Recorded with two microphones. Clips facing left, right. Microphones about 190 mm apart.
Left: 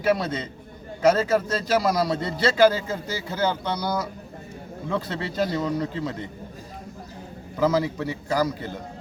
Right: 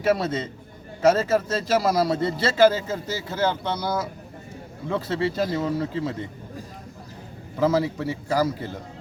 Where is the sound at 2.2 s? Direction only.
30° right (ahead or behind).